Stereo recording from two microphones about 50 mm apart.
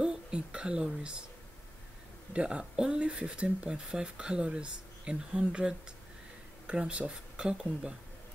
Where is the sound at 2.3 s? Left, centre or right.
Right.